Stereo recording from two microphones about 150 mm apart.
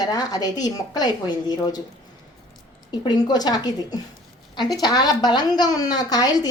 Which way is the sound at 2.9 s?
25° left (ahead or behind).